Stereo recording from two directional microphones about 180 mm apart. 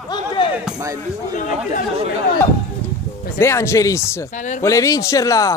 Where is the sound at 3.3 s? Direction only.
15° left (ahead or behind).